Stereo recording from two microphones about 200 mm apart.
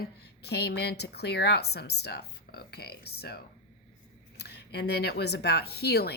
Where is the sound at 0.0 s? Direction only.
55° left (ahead or behind).